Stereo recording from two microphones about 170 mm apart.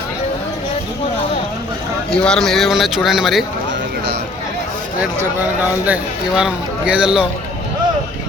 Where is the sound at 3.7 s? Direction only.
90° right.